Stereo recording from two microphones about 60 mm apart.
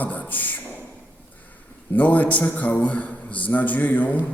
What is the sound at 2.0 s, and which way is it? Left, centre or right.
A man's voice, left.